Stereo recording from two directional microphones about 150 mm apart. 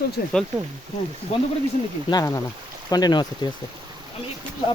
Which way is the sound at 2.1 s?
25° left (ahead or behind).